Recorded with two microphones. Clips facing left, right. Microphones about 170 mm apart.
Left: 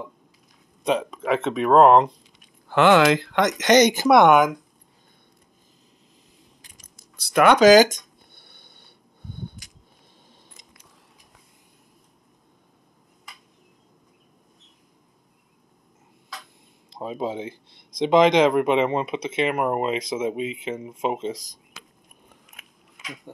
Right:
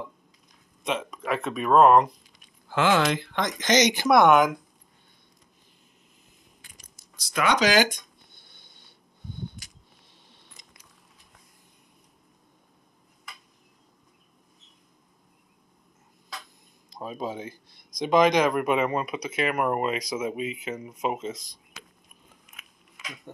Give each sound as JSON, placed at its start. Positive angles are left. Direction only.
{"t": 0.8, "sound": "speech", "side_deg": 30}
{"t": 2.7, "sound": "speech", "side_deg": 65}
{"t": 7.0, "sound": "speech", "side_deg": 60}
{"t": 7.7, "sound": "speech", "side_deg": 40}
{"t": 8.4, "sound": "a sound", "side_deg": 60}
{"t": 17.0, "sound": "speech", "side_deg": 25}